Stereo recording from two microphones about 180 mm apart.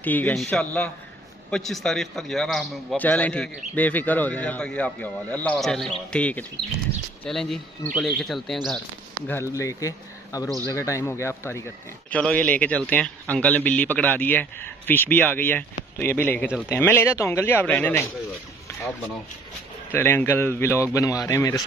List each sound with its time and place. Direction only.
0.0 s a man's voice: 10° left (ahead or behind)
9.3 s a man's voice: 15° left (ahead or behind)
19.9 s a man's voice: 10° left (ahead or behind)